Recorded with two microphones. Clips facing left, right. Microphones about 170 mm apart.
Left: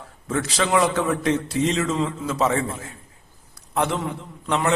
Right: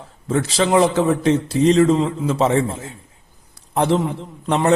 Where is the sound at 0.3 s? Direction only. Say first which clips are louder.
Right 5 dB; 30° right (ahead or behind).